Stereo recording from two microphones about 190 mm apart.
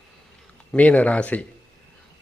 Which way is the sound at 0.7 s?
5° left (ahead or behind).